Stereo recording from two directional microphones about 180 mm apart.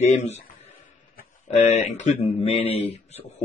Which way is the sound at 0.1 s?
40° left (ahead or behind).